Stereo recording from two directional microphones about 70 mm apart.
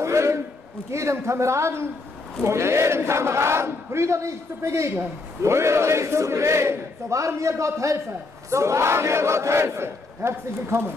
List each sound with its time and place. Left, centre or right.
0.0 s a sound: right
0.9 s a man's voice: right
2.4 s battle cry: right